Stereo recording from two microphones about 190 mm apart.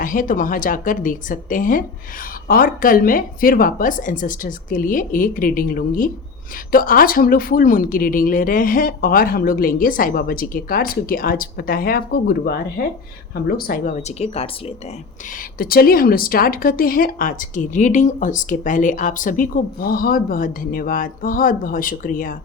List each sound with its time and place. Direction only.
0.0 s speech: 45° left (ahead or behind)
15.5 s speech: 50° left (ahead or behind)